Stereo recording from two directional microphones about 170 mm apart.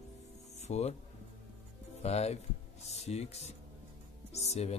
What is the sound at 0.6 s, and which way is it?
Speech, 40° left (ahead or behind).